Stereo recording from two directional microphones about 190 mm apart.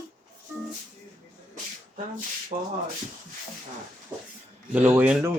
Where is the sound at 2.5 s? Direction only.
35° right (ahead or behind).